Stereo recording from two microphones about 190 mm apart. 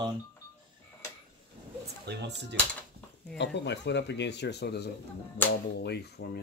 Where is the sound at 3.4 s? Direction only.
65° left (ahead or behind).